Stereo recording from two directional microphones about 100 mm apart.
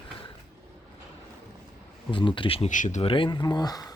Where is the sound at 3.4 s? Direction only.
40° left (ahead or behind).